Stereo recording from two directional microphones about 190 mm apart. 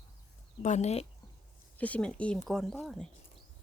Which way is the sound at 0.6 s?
35° left (ahead or behind).